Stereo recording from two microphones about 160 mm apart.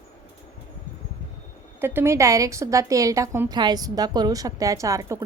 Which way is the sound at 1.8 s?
15° right (ahead or behind).